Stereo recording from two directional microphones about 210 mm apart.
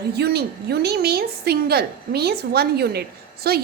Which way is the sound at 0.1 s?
50° right (ahead or behind).